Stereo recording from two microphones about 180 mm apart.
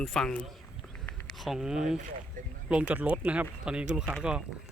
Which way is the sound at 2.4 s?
45° right (ahead or behind).